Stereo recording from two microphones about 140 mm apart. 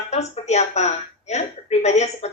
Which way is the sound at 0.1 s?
50° left (ahead or behind).